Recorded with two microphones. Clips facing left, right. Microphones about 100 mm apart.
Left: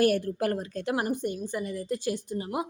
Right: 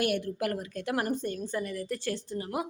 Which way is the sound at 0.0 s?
35° left (ahead or behind).